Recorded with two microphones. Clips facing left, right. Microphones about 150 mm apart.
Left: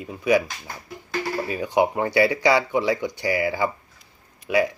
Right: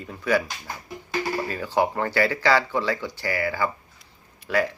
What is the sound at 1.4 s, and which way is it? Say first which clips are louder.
Speech: left 6 dB; 15° left (ahead or behind).